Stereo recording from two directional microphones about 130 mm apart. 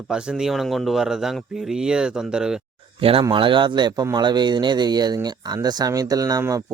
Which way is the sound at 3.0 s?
45° right (ahead or behind).